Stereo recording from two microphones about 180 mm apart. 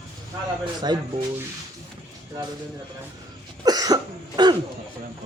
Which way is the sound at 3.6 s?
20° right (ahead or behind).